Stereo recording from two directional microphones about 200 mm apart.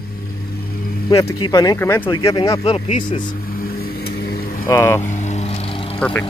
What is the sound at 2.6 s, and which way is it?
Speech, 30° left (ahead or behind).